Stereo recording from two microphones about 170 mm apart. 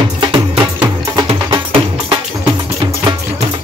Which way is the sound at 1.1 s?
30° right (ahead or behind).